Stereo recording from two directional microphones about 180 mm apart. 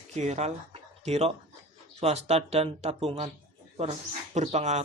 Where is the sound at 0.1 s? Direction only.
35° right (ahead or behind).